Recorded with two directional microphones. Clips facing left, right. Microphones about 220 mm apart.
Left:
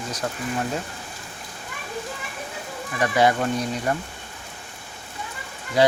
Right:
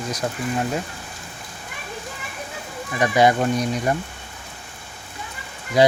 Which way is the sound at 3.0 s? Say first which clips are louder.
Right 3 dB; 15° right (ahead or behind).